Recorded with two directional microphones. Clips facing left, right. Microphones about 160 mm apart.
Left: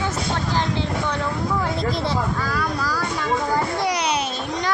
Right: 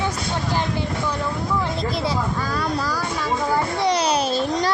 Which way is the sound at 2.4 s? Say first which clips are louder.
Right 1 dB; 25° right (ahead or behind).